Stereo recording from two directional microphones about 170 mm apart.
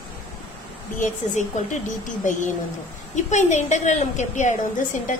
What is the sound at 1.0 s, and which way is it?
A woman's voice, 45° left (ahead or behind).